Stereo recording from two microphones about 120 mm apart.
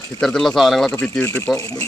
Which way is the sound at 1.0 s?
15° left (ahead or behind).